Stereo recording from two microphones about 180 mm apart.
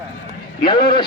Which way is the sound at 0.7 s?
25° left (ahead or behind).